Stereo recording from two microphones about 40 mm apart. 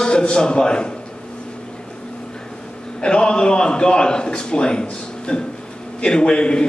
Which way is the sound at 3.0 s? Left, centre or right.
Left.